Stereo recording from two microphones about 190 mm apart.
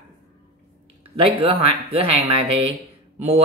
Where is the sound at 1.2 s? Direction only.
30° right (ahead or behind).